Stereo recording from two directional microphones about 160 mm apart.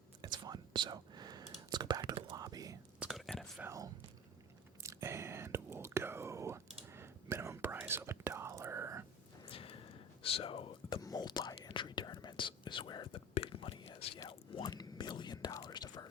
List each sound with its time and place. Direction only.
0.2 s whispering: 25° right (ahead or behind)
3.0 s whispering: centre (ahead or behind)
3.6 s speech: 20° right (ahead or behind)
4.8 s whispering: 15° right (ahead or behind)
9.5 s a sound: 35° left (ahead or behind)
10.2 s whispering: 35° left (ahead or behind)
10.8 s whispering: 25° left (ahead or behind)